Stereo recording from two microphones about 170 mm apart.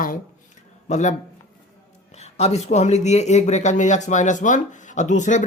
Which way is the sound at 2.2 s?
40° left (ahead or behind).